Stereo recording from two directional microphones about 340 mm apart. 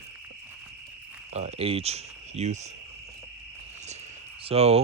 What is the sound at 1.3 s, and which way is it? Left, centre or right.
Speech, centre.